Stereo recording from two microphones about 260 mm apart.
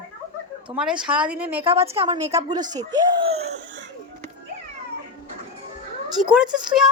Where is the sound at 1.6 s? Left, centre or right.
Right.